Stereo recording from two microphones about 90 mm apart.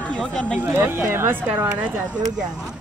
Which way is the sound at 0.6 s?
25° right (ahead or behind).